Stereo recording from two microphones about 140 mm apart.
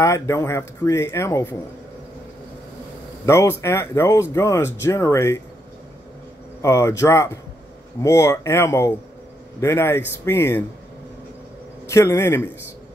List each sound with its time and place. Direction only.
0.0 s speech: 20° left (ahead or behind)
3.3 s speech: 20° left (ahead or behind)
6.6 s speech: 20° left (ahead or behind)
11.9 s speech: 20° left (ahead or behind)